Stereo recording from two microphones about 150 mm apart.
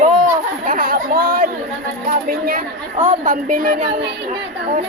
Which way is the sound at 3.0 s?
60° right (ahead or behind).